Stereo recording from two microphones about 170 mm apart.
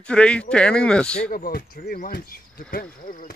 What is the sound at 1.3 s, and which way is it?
Speech, 60° left (ahead or behind).